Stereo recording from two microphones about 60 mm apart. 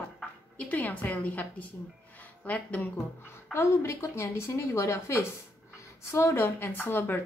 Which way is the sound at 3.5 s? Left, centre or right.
Left.